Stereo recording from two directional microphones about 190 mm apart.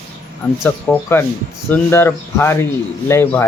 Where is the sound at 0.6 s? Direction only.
10° left (ahead or behind).